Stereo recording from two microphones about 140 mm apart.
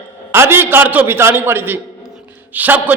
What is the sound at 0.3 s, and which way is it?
A man's voice, 15° right (ahead or behind).